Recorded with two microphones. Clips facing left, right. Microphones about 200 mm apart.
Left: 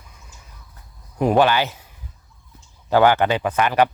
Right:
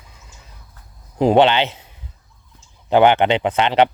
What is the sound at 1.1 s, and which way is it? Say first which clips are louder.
Speech: right 3 dB; 25° right (ahead or behind).